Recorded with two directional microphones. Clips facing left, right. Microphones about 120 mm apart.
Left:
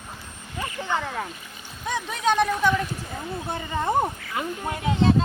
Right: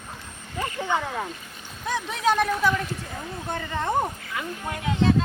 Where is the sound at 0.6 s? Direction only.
10° right (ahead or behind).